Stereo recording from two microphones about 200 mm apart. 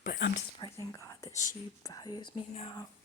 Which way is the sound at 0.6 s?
20° left (ahead or behind).